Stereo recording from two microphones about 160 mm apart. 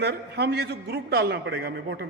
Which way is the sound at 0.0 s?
90° right.